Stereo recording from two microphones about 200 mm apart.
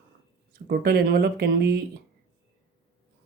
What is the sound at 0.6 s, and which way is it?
Speech, 50° right (ahead or behind).